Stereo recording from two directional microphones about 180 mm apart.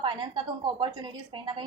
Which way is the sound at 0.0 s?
25° right (ahead or behind).